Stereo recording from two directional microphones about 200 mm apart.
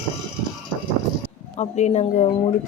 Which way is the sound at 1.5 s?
35° left (ahead or behind).